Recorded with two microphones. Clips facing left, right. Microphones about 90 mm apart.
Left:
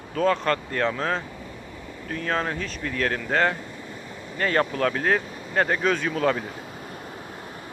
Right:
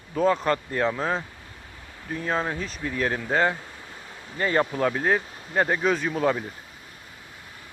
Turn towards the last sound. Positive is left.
turn(degrees=-10)  # may be behind; listen again after turning